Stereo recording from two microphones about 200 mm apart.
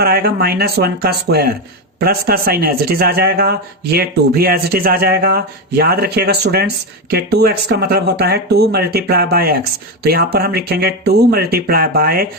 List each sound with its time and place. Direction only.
0.0 s a man's voice: 50° right (ahead or behind)